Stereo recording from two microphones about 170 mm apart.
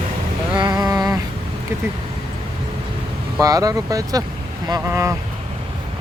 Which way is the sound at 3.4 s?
20° right (ahead or behind).